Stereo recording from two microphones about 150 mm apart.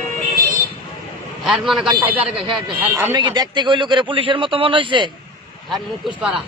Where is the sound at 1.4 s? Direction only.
Centre (ahead or behind).